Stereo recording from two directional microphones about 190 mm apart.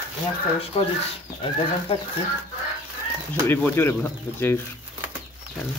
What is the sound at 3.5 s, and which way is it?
Speech, 10° left (ahead or behind).